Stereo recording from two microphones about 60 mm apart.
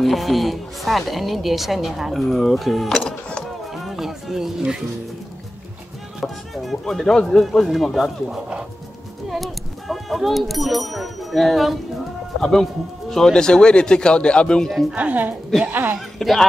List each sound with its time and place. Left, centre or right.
0.0 s a woman's voice: centre
3.0 s music: centre
3.7 s speech: centre
6.2 s a woman's voice: centre
8.3 s speech: centre
9.3 s a woman's voice: centre
15.0 s a woman's voice: right
16.2 s speech: centre